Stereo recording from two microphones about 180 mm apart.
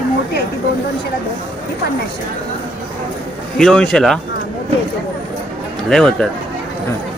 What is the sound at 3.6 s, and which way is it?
Speech, 5° left (ahead or behind).